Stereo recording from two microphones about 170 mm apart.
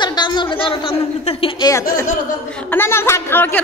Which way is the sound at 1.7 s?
20° left (ahead or behind).